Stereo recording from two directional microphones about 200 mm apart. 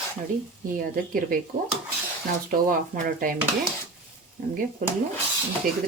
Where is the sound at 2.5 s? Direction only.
45° right (ahead or behind).